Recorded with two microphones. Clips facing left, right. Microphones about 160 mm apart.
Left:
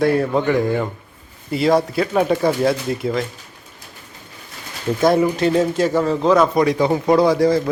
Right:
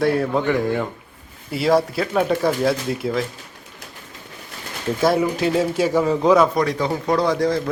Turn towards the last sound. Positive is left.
turn(degrees=5)  # may be behind; listen again after turning